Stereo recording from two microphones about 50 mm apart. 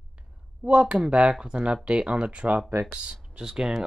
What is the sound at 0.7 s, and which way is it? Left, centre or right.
Speech, right.